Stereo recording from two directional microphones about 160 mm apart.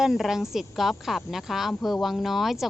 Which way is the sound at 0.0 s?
Centre (ahead or behind).